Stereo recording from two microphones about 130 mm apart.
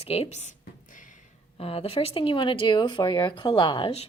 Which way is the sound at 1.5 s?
45° left (ahead or behind).